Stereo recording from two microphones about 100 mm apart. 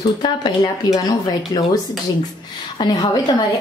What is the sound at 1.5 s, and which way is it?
Speech, 40° left (ahead or behind).